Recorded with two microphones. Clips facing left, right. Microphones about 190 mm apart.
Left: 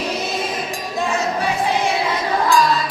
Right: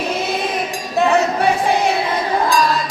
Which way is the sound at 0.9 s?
65° right (ahead or behind).